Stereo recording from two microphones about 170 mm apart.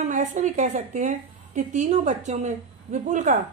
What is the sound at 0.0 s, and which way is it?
A woman's voice, 45° right (ahead or behind).